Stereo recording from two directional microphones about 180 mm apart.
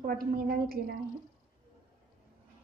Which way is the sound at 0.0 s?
50° right (ahead or behind).